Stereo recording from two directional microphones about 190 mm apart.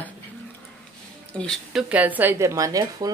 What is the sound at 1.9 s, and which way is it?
A woman's voice, 10° right (ahead or behind).